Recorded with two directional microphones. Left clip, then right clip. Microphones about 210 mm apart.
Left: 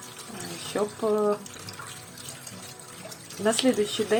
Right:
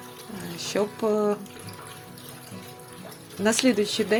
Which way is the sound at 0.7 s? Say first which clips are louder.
Right 1 dB; 30° right (ahead or behind).